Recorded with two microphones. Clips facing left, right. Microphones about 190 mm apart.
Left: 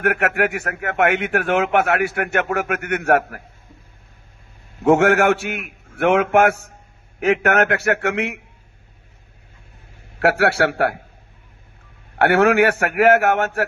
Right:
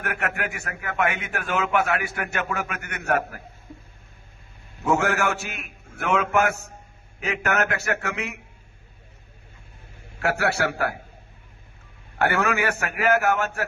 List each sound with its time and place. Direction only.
0.0 s a man's voice: 65° left (ahead or behind)
4.8 s a man's voice: 60° left (ahead or behind)
10.2 s a man's voice: 60° left (ahead or behind)
12.2 s a man's voice: 60° left (ahead or behind)